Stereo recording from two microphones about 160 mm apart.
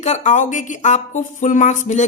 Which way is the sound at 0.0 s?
45° left (ahead or behind).